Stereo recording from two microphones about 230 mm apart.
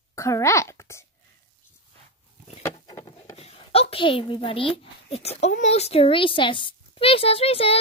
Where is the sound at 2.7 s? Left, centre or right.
Left.